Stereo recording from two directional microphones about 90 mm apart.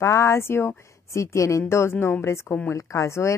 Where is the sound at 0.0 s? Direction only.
30° left (ahead or behind).